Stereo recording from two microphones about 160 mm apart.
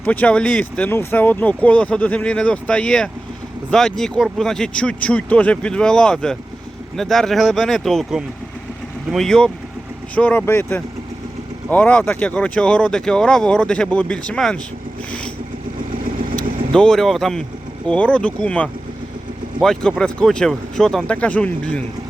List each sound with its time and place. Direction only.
0.0 s speech: 10° left (ahead or behind)
16.7 s speech: 5° left (ahead or behind)